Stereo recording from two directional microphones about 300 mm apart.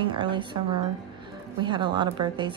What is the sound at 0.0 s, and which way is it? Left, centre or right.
A woman's voice, centre.